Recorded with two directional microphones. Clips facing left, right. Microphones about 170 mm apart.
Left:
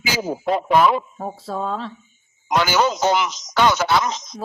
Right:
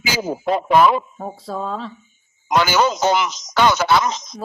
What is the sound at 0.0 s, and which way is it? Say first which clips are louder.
Speech: right 1 dB; 90° right.